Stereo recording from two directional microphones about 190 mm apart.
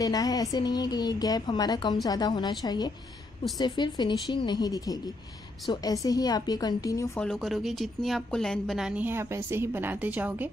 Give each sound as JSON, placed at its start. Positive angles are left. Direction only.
{"t": 0.0, "sound": "speech", "side_deg": 20}
{"t": 7.2, "sound": "a woman's voice", "side_deg": 0}